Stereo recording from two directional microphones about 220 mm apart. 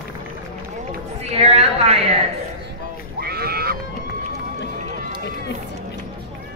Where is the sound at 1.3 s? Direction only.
30° right (ahead or behind).